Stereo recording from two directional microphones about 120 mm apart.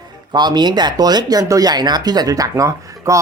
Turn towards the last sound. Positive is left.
turn(degrees=-25)  # may be behind; listen again after turning